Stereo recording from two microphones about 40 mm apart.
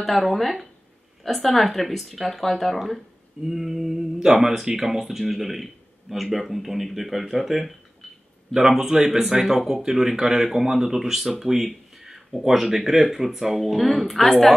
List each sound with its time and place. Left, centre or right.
0.0 s speech: centre
3.4 s speech: centre
8.5 s speech: centre